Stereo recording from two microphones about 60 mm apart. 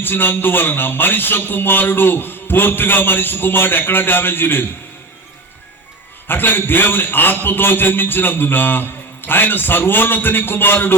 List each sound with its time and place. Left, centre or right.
0.0 s a man's voice: left
6.2 s a man's voice: left